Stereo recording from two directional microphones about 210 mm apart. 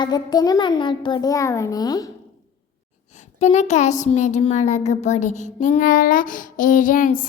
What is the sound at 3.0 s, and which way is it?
A woman's voice, 35° left (ahead or behind).